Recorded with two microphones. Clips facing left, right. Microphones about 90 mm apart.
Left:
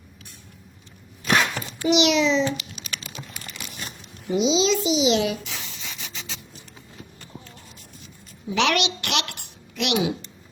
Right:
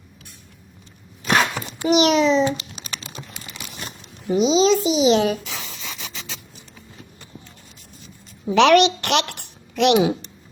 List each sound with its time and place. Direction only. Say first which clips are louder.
1.5 s a sound: right 2 dB; 20° right (ahead or behind)
1.9 s a child's voice: right 3 dB; 40° right (ahead or behind)
2.5 s crumpling: right 3 dB; 30° right (ahead or behind)
3.3 s crumpling: right 1 dB; 20° right (ahead or behind)
4.3 s a child's voice: right 4 dB; 40° right (ahead or behind)
8.4 s a woman's voice: right 9 dB; 45° right (ahead or behind)